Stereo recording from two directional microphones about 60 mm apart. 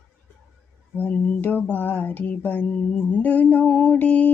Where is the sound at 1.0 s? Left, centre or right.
Left.